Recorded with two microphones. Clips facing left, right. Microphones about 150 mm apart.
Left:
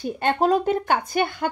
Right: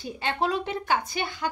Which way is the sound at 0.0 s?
50° left (ahead or behind).